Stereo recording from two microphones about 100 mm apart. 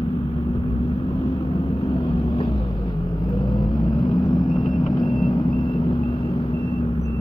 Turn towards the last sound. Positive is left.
turn(degrees=50)  # may be behind; listen again after turning